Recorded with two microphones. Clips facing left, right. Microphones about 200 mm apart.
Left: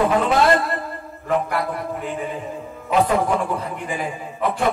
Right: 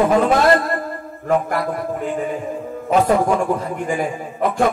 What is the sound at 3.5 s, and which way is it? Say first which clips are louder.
A man's voice: right 5 dB; 45° right (ahead or behind).